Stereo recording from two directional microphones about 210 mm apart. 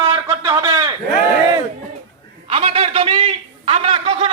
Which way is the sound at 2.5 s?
30° right (ahead or behind).